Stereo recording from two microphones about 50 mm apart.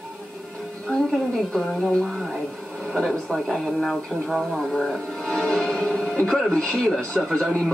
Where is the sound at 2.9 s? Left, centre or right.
Centre.